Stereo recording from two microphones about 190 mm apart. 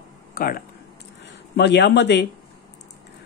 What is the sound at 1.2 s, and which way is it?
Speech, 60° left (ahead or behind).